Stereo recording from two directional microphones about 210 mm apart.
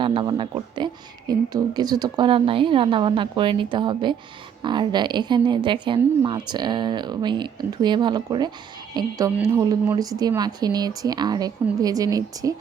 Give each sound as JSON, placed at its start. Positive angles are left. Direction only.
{"t": 0.0, "sound": "speech", "side_deg": -25}